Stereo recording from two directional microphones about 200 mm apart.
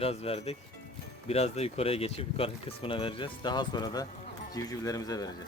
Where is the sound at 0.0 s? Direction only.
30° left (ahead or behind).